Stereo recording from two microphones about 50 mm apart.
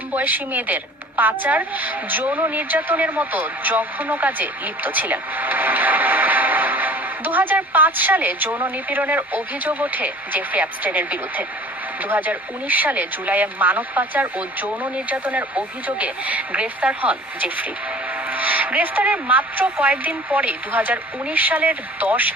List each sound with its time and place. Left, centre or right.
0.1 s speech: right